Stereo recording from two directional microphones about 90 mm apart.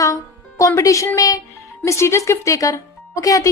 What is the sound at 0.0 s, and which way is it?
Music, 35° left (ahead or behind).